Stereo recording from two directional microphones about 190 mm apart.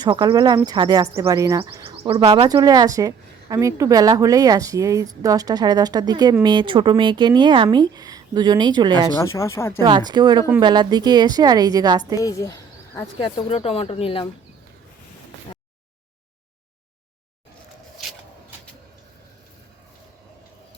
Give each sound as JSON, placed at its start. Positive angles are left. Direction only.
{"t": 0.0, "sound": "a woman's voice", "side_deg": -25}
{"t": 9.1, "sound": "speech", "side_deg": 15}
{"t": 9.8, "sound": "a woman's voice", "side_deg": -20}
{"t": 12.2, "sound": "a sound", "side_deg": 20}
{"t": 13.1, "sound": "speech", "side_deg": 25}